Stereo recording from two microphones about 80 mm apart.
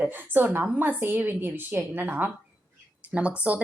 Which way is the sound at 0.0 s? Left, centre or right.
Right.